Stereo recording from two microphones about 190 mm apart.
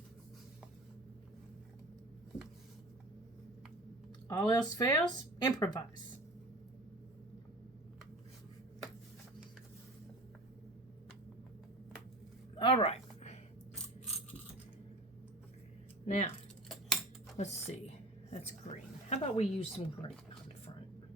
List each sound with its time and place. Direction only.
4.4 s speech: 20° left (ahead or behind)
12.5 s a sound: 30° left (ahead or behind)
16.0 s speech: 40° left (ahead or behind)
17.3 s a woman's voice: 35° left (ahead or behind)